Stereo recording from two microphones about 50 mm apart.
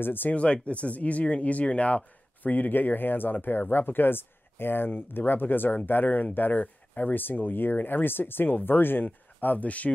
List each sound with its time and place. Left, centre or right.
0.0 s speech: left
0.3 s speech: left